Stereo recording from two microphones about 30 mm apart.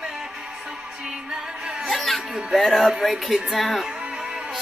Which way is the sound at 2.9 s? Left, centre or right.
Centre.